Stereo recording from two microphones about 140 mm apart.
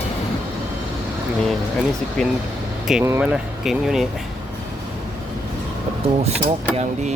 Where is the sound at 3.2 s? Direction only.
5° right (ahead or behind).